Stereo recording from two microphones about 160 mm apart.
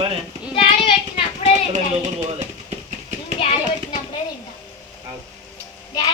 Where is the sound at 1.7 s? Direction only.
45° right (ahead or behind).